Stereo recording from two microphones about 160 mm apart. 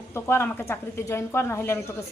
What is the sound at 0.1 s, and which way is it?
Speech, 15° left (ahead or behind).